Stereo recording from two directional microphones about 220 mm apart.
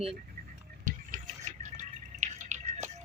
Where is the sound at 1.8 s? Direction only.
35° right (ahead or behind).